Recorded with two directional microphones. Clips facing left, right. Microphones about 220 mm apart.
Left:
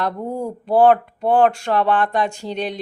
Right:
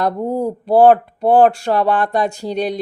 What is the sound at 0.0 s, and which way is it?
Speech, 35° right (ahead or behind).